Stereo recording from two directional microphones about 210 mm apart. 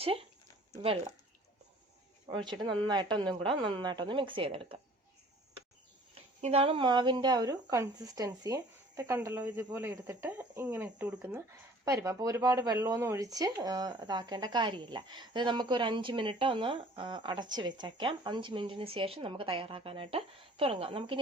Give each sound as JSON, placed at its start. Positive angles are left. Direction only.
{"t": 0.0, "sound": "speech", "side_deg": -25}
{"t": 2.2, "sound": "speech", "side_deg": -20}
{"t": 6.1, "sound": "speech", "side_deg": -30}